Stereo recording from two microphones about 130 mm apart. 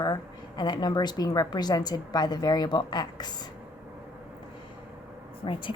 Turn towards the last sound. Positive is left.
turn(degrees=40)  # may be behind; listen again after turning